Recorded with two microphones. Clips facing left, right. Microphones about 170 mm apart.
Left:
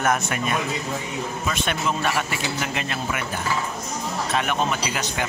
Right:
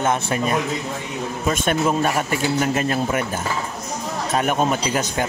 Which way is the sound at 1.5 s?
45° right (ahead or behind).